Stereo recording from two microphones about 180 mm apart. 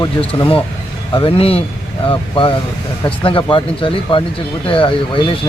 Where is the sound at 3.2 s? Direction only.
30° left (ahead or behind).